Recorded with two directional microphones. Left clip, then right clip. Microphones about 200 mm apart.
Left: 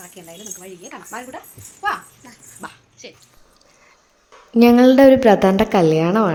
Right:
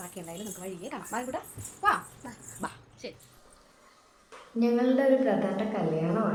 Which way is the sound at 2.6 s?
10° left (ahead or behind).